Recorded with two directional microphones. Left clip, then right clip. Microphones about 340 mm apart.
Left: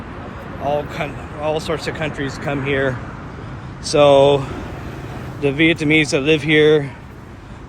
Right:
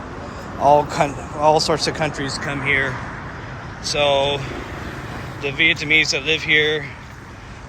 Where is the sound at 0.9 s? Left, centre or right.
Centre.